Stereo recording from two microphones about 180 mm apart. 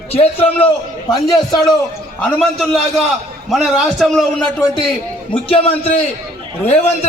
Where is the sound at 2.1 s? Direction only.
5° left (ahead or behind).